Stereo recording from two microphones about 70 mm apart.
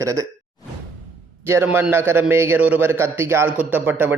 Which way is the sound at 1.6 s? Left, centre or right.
Right.